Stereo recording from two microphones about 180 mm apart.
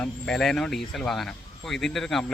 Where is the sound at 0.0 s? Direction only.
5° left (ahead or behind).